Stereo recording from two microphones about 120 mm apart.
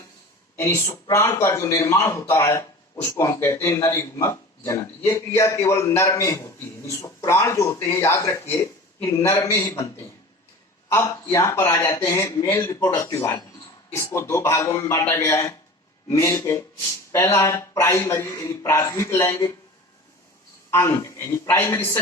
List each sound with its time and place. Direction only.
0.5 s a man's voice: 20° left (ahead or behind)
11.0 s a man's voice: 25° left (ahead or behind)
20.7 s a man's voice: 25° left (ahead or behind)